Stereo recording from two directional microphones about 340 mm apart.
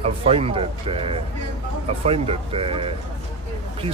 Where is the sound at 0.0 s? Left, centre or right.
Centre.